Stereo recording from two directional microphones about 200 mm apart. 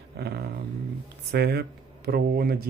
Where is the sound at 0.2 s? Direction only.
55° right (ahead or behind).